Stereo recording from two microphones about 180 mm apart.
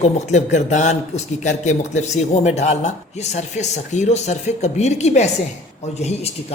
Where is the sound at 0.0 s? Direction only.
40° left (ahead or behind).